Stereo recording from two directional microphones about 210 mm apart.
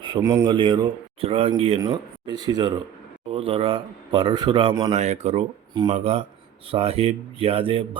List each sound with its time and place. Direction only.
0.0 s a man's voice: 20° right (ahead or behind)
4.9 s a man's voice: 30° right (ahead or behind)